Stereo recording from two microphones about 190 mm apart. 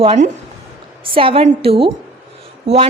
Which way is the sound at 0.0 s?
30° right (ahead or behind).